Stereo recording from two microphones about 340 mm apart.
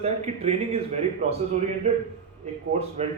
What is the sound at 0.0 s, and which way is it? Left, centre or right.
Speech, centre.